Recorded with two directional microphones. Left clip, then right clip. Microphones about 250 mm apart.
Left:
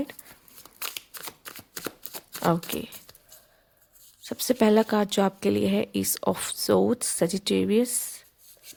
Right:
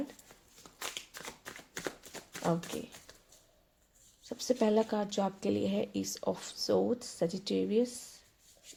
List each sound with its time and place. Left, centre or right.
0.8 s shuffling cards: left
2.4 s speech: left
4.2 s speech: left